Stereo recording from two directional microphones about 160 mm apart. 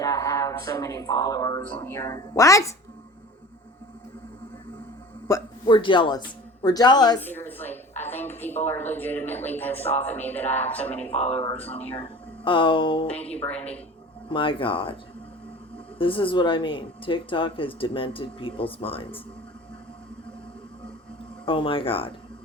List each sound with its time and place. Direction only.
0.0 s speech: 20° left (ahead or behind)
1.6 s a woman's voice: 10° left (ahead or behind)
5.3 s a man's voice: 30° left (ahead or behind)
7.2 s a woman's voice: 10° left (ahead or behind)
11.1 s speech: 40° left (ahead or behind)
13.1 s a woman's voice: 10° left (ahead or behind)
14.3 s speech: 30° left (ahead or behind)
16.0 s speech: 35° left (ahead or behind)
21.4 s speech: 35° left (ahead or behind)